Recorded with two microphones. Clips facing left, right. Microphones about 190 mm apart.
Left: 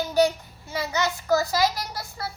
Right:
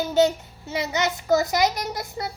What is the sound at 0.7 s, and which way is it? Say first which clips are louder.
A child's voice: right 2 dB; 20° right (ahead or behind).